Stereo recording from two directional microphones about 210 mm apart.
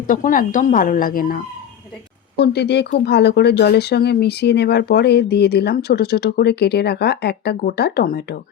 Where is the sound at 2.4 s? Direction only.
50° left (ahead or behind).